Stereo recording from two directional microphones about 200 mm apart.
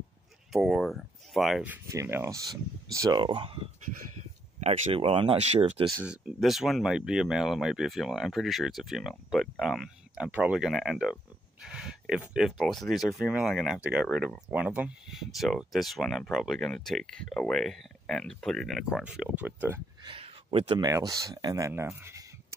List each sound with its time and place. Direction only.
0.5 s speech: centre (ahead or behind); by 5.9 s 30° right (ahead or behind)
6.0 s speech: centre (ahead or behind)
20.0 s speech: 25° right (ahead or behind); by 22.2 s 10° right (ahead or behind)